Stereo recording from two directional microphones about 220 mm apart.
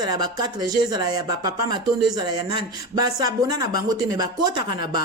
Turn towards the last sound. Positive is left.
turn(degrees=-20)  # may be behind; listen again after turning